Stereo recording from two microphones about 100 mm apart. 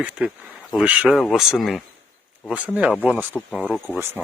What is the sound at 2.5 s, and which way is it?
Speech, 10° right (ahead or behind).